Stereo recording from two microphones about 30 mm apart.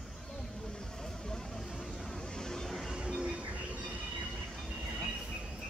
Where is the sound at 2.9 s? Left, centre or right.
Right.